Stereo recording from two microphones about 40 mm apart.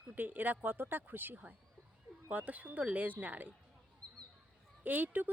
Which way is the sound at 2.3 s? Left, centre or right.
Right.